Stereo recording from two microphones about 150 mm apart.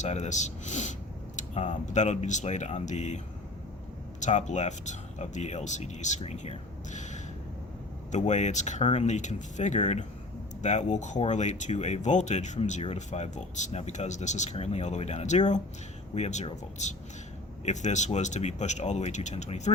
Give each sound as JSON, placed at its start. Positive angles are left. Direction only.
{"t": 0.0, "sound": "speech", "side_deg": 50}
{"t": 4.2, "sound": "speech", "side_deg": 50}